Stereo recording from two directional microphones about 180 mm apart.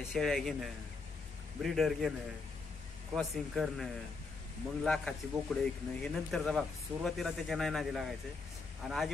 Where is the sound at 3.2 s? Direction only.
Centre (ahead or behind).